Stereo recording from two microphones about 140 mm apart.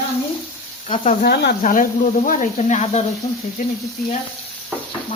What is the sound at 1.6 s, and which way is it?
Speech, 70° left (ahead or behind).